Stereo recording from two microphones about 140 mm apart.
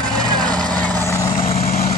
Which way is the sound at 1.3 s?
45° left (ahead or behind).